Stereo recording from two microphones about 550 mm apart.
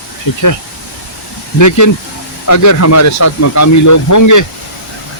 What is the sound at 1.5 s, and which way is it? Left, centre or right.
Speech, left.